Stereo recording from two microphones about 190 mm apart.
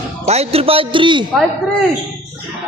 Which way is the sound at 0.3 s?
30° right (ahead or behind).